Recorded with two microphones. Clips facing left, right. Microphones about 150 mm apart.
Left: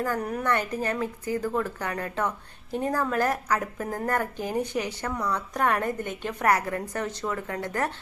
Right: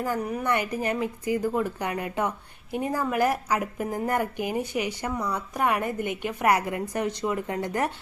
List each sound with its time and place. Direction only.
0.0 s speech: 10° right (ahead or behind)